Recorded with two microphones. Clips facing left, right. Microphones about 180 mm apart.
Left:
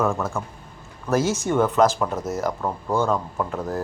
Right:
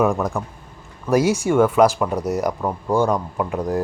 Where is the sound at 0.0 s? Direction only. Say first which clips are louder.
Right 4 dB; 15° right (ahead or behind).